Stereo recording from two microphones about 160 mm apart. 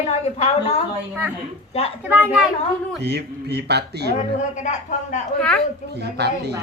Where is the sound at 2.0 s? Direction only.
10° right (ahead or behind).